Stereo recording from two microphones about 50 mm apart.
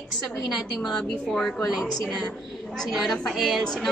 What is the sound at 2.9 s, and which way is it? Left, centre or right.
A woman's voice, centre.